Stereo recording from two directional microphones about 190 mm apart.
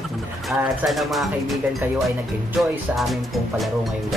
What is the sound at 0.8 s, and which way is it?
Speech, centre (ahead or behind).